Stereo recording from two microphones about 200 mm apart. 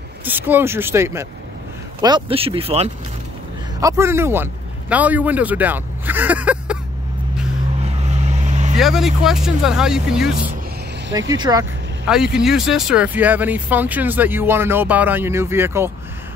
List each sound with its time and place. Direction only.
0.2 s speech: 10° right (ahead or behind); by 2.9 s 30° right (ahead or behind)
3.8 s a man's voice: 15° right (ahead or behind)
7.8 s vehicle: 35° right (ahead or behind)
8.7 s speech: centre (ahead or behind)
11.1 s speech: 20° right (ahead or behind)
12.1 s speech: 5° right (ahead or behind)